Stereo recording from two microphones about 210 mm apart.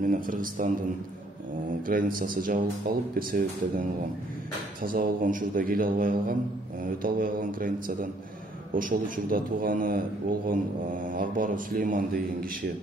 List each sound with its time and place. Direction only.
0.0 s speech: 40° right (ahead or behind)
1.9 s speech: 40° right (ahead or behind)
4.8 s a man's voice: 40° right (ahead or behind)
11.1 s speech: 40° right (ahead or behind)